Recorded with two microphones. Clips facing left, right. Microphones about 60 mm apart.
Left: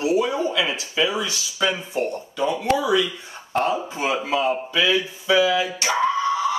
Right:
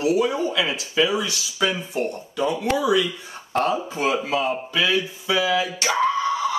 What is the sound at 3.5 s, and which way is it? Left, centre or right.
Speech, centre.